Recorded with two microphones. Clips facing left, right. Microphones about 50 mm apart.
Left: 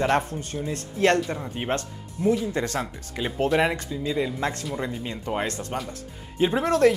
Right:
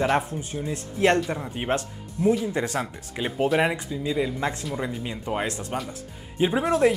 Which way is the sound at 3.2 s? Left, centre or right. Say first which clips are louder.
Even; centre.